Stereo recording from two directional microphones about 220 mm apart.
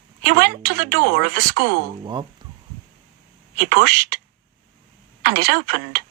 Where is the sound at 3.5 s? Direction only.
45° right (ahead or behind).